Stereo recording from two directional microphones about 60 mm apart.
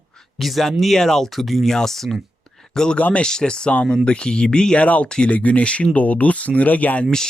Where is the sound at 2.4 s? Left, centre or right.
Centre.